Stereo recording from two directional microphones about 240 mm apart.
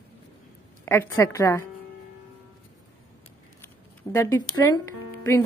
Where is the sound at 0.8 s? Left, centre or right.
Centre.